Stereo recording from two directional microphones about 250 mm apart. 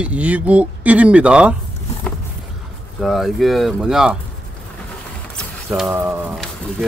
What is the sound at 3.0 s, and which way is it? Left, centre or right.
Speech, centre.